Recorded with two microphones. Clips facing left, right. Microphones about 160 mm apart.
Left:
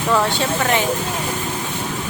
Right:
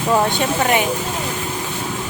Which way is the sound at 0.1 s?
20° right (ahead or behind).